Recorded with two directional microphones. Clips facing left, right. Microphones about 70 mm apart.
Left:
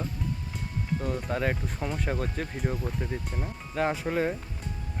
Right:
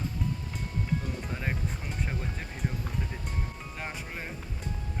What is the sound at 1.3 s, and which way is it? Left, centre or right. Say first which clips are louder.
Speech: left 5 dB; left.